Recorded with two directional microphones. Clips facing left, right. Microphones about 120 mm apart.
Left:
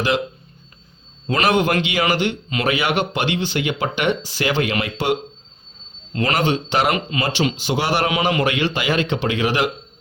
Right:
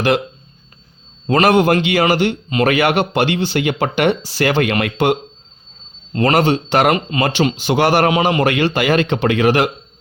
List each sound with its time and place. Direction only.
1.3 s a man's voice: 45° right (ahead or behind)
6.1 s a man's voice: 40° right (ahead or behind)
8.1 s a man's voice: 35° right (ahead or behind)